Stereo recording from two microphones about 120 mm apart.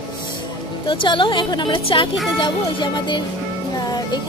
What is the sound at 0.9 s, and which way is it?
A woman's voice, 45° left (ahead or behind).